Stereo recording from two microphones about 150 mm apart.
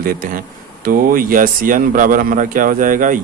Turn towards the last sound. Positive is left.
turn(degrees=-65)  # may be behind; listen again after turning